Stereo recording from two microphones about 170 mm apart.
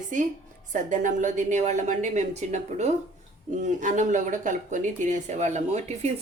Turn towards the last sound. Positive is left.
turn(degrees=-40)  # may be behind; listen again after turning